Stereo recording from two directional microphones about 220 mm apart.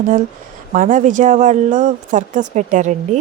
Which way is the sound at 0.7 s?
35° right (ahead or behind).